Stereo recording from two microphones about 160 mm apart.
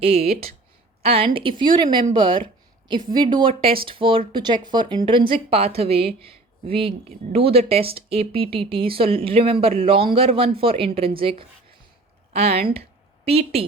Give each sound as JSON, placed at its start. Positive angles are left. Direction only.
{"t": 0.0, "sound": "speech", "side_deg": -40}